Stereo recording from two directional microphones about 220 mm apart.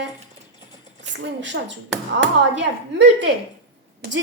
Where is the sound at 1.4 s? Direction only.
55° right (ahead or behind).